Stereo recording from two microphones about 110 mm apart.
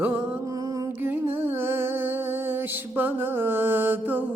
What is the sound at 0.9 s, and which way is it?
Music, 20° right (ahead or behind).